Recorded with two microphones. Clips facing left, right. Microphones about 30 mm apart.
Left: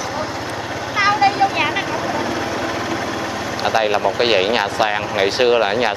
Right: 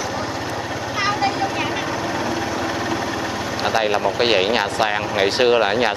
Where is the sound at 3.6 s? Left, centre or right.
Centre.